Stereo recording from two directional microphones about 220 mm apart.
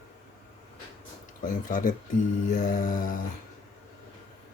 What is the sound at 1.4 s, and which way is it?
Speech, 35° left (ahead or behind).